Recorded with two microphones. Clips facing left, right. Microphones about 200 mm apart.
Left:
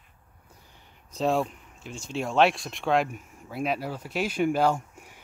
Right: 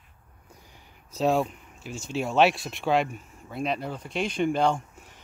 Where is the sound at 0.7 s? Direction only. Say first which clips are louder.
Right 1 dB; 5° right (ahead or behind).